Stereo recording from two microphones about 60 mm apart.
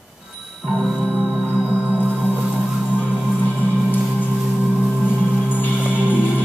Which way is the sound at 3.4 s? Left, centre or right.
Left.